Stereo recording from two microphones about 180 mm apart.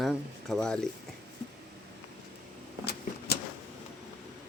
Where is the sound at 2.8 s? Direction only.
65° left (ahead or behind).